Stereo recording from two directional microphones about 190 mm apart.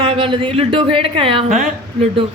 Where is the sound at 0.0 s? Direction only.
30° right (ahead or behind).